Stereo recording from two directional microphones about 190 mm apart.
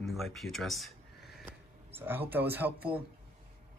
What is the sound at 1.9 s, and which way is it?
Speech, 10° right (ahead or behind).